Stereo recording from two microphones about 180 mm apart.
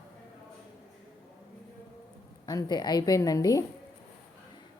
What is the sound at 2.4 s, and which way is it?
A woman's voice, 25° left (ahead or behind).